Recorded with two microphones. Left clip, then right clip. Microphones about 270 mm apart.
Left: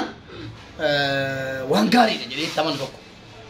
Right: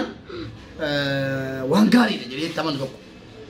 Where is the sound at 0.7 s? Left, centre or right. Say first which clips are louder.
Left 3 dB; centre.